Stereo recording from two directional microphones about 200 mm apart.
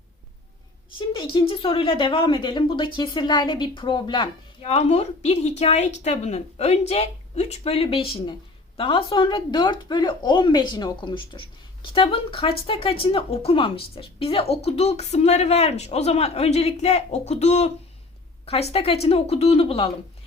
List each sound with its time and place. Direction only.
0.9 s speech: 25° left (ahead or behind)